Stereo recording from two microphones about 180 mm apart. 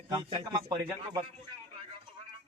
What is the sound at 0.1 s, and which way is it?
Speech, 20° right (ahead or behind).